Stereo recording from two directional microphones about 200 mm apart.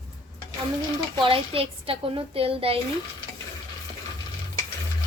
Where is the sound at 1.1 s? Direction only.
25° right (ahead or behind).